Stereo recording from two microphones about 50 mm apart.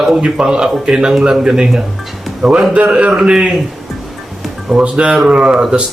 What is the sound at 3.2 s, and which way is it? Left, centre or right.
Speech, centre.